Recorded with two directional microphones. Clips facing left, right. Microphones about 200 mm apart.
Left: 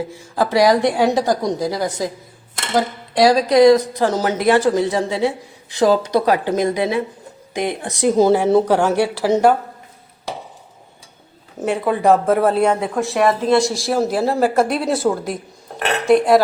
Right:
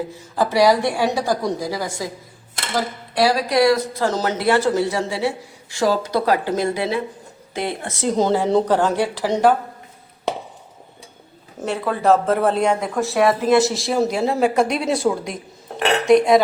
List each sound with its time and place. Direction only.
0.3 s speech: 15° left (ahead or behind)
3.2 s speech: 20° left (ahead or behind)
11.6 s speech: 15° left (ahead or behind)